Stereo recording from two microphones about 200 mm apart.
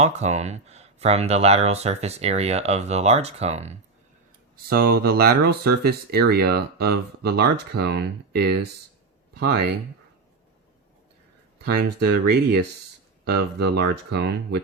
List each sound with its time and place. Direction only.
0.0 s speech: 35° right (ahead or behind)
4.5 s speech: 50° right (ahead or behind)
11.6 s speech: 50° right (ahead or behind)